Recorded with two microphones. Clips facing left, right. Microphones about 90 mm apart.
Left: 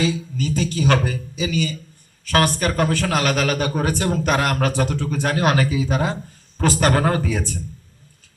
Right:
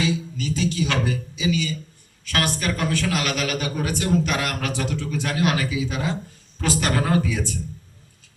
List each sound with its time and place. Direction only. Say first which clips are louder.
0.0 s a man's voice: left 2 dB; 40° left (ahead or behind)